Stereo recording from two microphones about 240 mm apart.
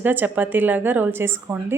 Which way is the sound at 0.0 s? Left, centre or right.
Centre.